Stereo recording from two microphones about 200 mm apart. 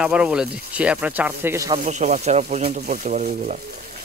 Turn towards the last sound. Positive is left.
turn(degrees=-35)  # may be behind; listen again after turning